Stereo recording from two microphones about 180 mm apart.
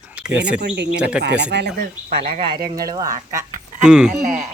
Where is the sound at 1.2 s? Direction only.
75° right (ahead or behind).